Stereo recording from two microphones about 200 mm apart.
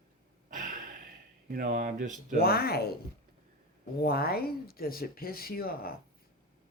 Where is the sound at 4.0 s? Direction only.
50° left (ahead or behind).